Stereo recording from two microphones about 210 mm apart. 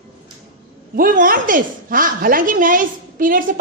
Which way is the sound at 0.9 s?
40° right (ahead or behind).